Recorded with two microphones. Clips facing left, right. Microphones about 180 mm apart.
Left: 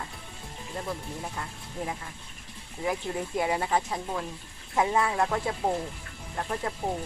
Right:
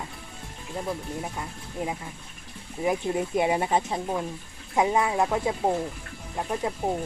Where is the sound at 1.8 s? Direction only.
15° right (ahead or behind).